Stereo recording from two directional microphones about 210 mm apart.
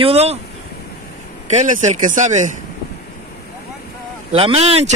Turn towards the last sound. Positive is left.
turn(degrees=-30)  # may be behind; listen again after turning